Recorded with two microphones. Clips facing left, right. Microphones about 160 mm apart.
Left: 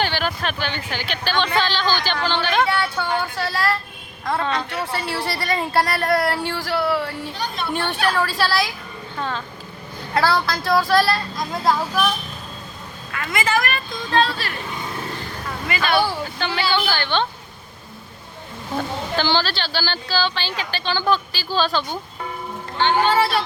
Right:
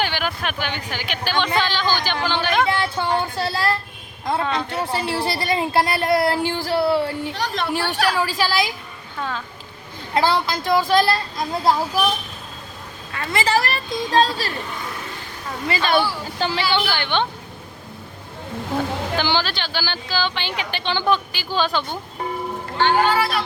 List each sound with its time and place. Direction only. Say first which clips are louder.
0.0 s a sound: left 1 dB; 10° right (ahead or behind)
2.7 s a sound: right 1 dB; 25° right (ahead or behind)
4.4 s a woman's voice: even; 10° right (ahead or behind)
4.7 s speech: right 2 dB; 25° right (ahead or behind)
7.3 s speech: right 3 dB; 90° right
8.1 s a woman's voice: even; 15° right (ahead or behind)
10.2 s a woman's voice: even; 20° right (ahead or behind)
13.1 s a woman's voice: right 2 dB; 30° right (ahead or behind)
15.6 s speech: right 1 dB; 30° right (ahead or behind)
19.1 s a woman's voice: left 3 dB; 15° right (ahead or behind)
22.8 s a woman's voice: even; 25° left (ahead or behind)